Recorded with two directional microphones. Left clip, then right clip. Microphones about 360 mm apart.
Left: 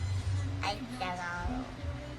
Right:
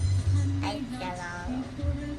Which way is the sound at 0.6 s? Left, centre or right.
Centre.